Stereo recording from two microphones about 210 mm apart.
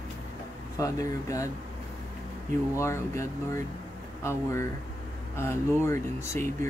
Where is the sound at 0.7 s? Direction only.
15° left (ahead or behind).